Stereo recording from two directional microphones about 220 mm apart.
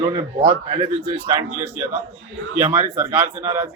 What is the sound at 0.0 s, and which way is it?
Speech, 20° right (ahead or behind).